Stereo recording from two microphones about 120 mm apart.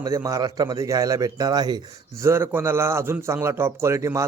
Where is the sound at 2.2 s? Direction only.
20° right (ahead or behind).